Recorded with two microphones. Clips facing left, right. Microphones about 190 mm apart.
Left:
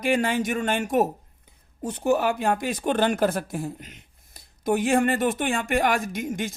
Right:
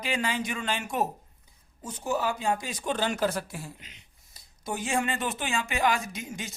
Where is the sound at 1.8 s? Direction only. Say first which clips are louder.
Left 7 dB; 60° left (ahead or behind).